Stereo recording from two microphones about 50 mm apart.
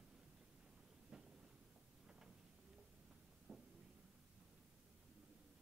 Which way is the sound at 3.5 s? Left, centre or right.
Centre.